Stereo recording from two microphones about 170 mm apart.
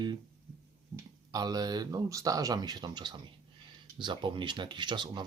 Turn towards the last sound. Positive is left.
turn(degrees=-25)  # may be behind; listen again after turning